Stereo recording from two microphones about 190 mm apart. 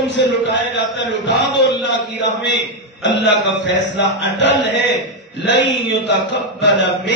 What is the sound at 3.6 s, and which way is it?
Mantra, 65° left (ahead or behind).